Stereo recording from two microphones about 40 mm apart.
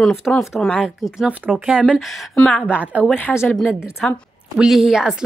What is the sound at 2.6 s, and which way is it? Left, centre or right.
Speech, right.